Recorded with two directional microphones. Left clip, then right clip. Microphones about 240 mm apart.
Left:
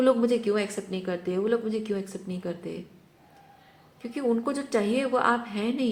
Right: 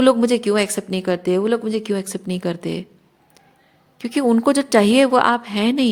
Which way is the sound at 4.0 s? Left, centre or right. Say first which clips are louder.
Right 9 dB; right.